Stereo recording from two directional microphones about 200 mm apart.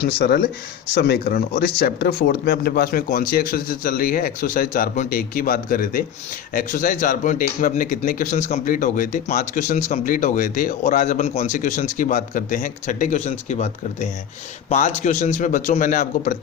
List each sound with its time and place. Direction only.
0.0 s speech: 55° left (ahead or behind)